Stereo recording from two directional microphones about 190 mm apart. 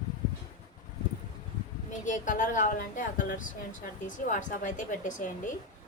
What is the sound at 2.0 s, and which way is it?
A woman's voice, 40° left (ahead or behind).